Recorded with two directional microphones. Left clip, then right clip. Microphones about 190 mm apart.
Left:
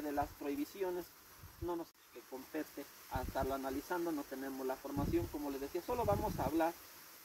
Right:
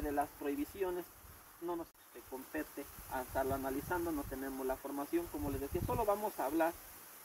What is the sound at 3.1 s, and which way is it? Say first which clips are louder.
Speech: right 2 dB; centre (ahead or behind).